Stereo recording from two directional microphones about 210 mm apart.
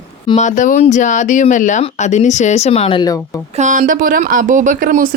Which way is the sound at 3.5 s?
35° right (ahead or behind).